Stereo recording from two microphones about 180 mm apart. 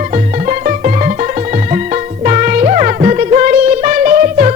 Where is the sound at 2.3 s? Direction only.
45° right (ahead or behind).